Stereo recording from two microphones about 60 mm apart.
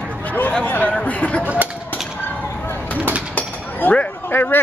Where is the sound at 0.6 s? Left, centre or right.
Left.